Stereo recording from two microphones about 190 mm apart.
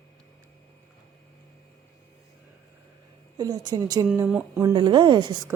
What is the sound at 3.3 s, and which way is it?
Speech, 20° right (ahead or behind).